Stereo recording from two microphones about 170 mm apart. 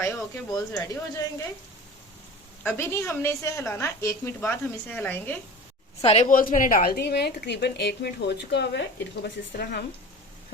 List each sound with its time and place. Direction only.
0.5 s speech: 20° left (ahead or behind)
2.6 s a woman's voice: 15° left (ahead or behind)
6.0 s speech: 35° left (ahead or behind)
6.2 s a woman's voice: 50° left (ahead or behind); by 8.8 s 85° left
9.2 s a woman's voice: 75° left (ahead or behind)